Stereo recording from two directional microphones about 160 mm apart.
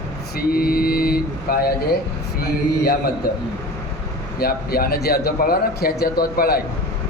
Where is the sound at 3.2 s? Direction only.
70° left (ahead or behind).